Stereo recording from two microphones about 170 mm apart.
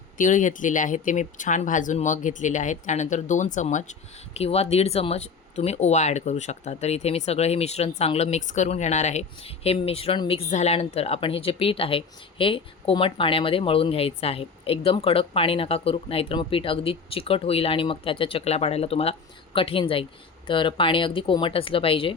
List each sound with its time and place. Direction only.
0.2 s speech: 50° left (ahead or behind); by 22.1 s 30° left (ahead or behind)